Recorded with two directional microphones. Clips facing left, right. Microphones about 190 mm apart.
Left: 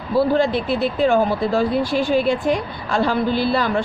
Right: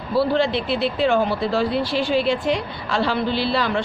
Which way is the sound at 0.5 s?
45° left (ahead or behind).